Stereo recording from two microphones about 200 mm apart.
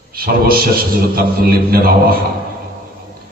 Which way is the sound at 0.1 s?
50° right (ahead or behind).